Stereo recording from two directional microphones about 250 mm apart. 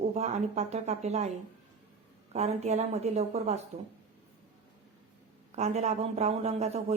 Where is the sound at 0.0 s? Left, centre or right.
Right.